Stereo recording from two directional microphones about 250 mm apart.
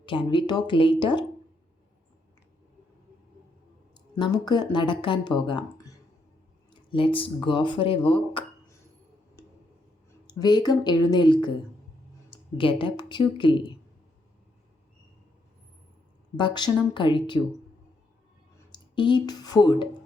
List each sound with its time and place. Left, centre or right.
0.0 s speech: centre
3.9 s speech: centre
10.2 s a woman's voice: centre
16.4 s a woman's voice: centre
18.7 s speech: centre